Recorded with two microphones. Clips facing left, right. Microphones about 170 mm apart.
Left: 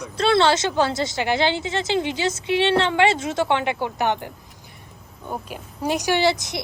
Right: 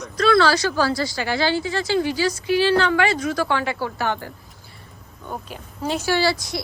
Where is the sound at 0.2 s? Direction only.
25° left (ahead or behind).